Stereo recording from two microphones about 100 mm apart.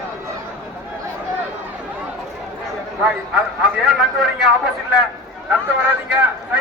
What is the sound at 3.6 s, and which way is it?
A man's voice, 5° right (ahead or behind).